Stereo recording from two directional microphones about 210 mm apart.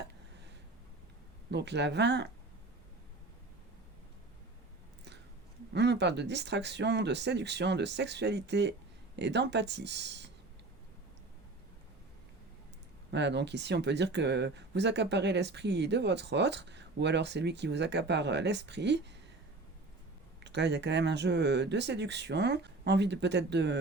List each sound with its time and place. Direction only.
1.5 s speech: 55° right (ahead or behind)
5.7 s speech: 55° right (ahead or behind)
13.1 s speech: 55° right (ahead or behind)
20.4 s speech: 55° right (ahead or behind)